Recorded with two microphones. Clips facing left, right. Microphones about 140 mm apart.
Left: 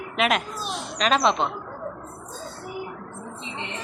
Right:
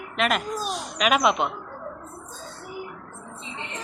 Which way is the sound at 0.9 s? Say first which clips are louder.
Even; 10° right (ahead or behind).